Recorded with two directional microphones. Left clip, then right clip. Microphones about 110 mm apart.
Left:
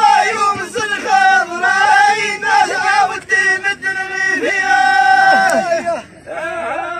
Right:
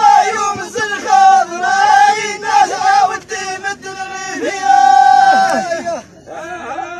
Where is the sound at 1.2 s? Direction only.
45° right (ahead or behind).